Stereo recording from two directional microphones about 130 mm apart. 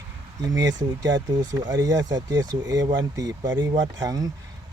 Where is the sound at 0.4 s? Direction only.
30° right (ahead or behind).